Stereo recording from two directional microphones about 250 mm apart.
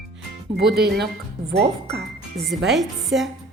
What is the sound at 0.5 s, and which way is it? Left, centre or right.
Speech, right.